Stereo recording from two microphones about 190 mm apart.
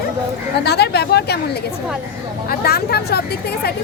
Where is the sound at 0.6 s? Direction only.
60° left (ahead or behind).